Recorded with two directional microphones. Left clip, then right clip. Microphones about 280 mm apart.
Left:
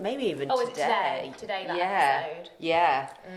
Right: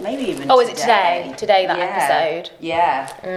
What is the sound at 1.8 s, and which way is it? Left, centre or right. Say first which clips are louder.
Speech: right 7 dB; left.